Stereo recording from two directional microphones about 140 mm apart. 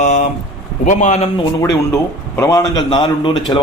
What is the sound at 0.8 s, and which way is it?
Speech, 65° left (ahead or behind).